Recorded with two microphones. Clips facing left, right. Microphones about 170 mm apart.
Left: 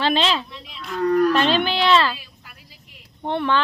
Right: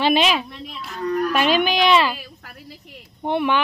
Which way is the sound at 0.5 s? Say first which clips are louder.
Right 5 dB; 50° right (ahead or behind).